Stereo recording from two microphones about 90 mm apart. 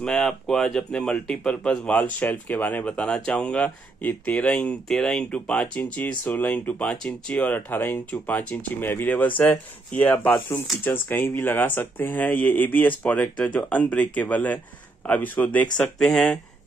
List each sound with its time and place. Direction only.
0.0 s speech: 10° left (ahead or behind)
4.8 s speech: 5° left (ahead or behind)
16.0 s speech: 5° left (ahead or behind)